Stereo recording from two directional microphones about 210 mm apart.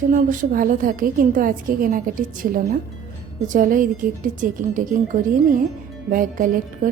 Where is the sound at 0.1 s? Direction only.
40° right (ahead or behind).